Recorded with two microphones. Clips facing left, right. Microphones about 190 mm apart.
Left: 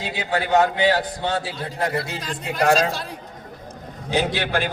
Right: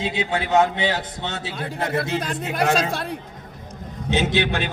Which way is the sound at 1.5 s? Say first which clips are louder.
Even; 55° right (ahead or behind).